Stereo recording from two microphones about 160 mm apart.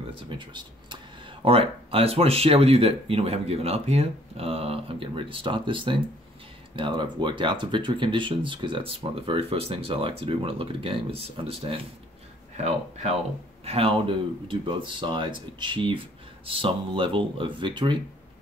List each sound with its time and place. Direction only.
0.1 s speech: 30° right (ahead or behind)